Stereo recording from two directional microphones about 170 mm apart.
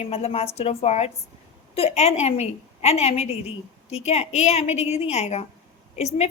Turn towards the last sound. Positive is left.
turn(degrees=40)  # may be behind; listen again after turning